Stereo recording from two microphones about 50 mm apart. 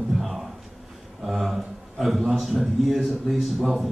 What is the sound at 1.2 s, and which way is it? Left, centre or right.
A man's voice, centre.